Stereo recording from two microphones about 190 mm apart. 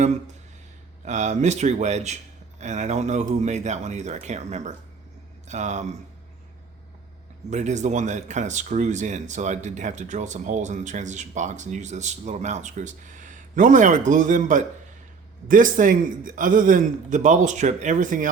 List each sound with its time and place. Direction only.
1.0 s speech: 40° right (ahead or behind)
7.5 s a man's voice: 40° right (ahead or behind)